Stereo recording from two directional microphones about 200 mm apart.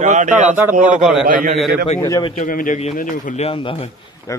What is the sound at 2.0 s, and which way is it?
Speech, 15° left (ahead or behind).